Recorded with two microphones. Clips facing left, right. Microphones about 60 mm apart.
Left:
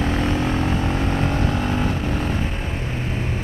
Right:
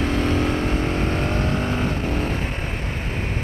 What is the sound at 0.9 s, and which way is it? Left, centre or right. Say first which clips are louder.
Vehicle: left 1 dB; right.